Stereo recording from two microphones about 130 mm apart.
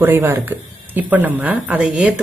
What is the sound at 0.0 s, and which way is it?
Speech, 15° right (ahead or behind).